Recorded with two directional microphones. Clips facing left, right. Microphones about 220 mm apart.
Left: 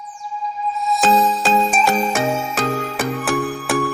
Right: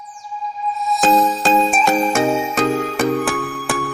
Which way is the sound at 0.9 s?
Centre (ahead or behind).